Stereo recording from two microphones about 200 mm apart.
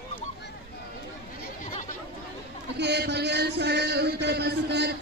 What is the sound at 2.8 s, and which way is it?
Speech, 55° right (ahead or behind).